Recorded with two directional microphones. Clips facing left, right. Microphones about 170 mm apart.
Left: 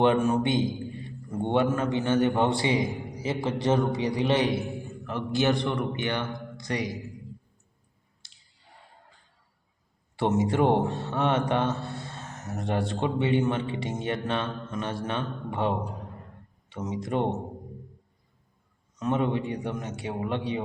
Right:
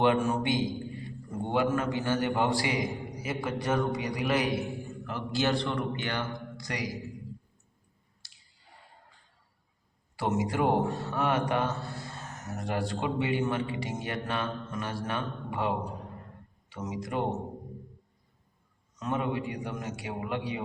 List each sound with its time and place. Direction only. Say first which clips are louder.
0.0 s a man's voice: left 3 dB; 20° left (ahead or behind)
10.2 s a man's voice: left 5 dB; 25° left (ahead or behind)
18.9 s a man's voice: left 4 dB; 20° left (ahead or behind)